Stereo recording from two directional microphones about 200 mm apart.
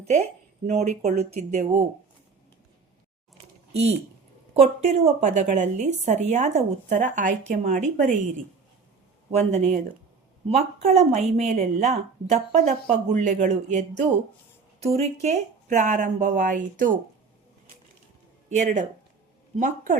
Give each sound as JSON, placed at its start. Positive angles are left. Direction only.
{"t": 0.0, "sound": "speech", "side_deg": -35}
{"t": 3.7, "sound": "speech", "side_deg": -30}
{"t": 9.3, "sound": "speech", "side_deg": -35}
{"t": 18.4, "sound": "speech", "side_deg": -40}